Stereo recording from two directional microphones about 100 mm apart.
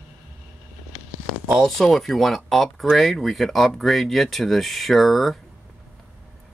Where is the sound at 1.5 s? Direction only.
Centre (ahead or behind).